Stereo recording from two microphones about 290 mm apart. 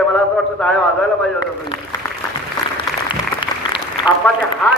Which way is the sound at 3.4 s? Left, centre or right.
Centre.